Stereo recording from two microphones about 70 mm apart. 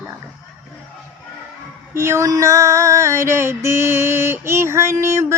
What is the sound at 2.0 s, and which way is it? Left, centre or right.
Mantra, right.